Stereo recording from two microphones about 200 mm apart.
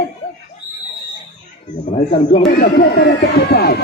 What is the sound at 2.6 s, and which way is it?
Speech, 50° left (ahead or behind).